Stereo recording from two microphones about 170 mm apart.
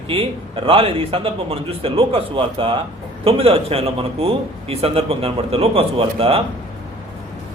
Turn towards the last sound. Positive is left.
turn(degrees=-35)  # may be behind; listen again after turning